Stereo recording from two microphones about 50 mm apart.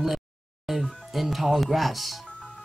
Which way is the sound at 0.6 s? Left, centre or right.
Centre.